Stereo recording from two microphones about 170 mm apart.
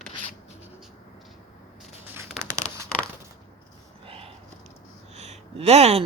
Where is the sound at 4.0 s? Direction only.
35° right (ahead or behind).